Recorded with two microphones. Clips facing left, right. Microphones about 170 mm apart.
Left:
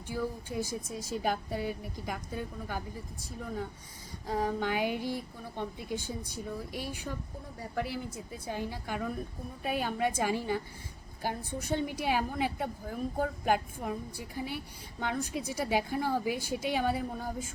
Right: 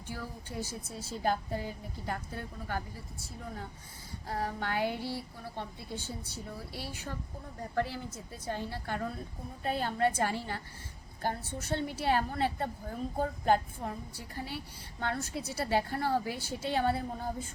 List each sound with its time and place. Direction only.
0.1 s a woman's voice: 15° left (ahead or behind)
4.3 s a woman's voice: 15° left (ahead or behind)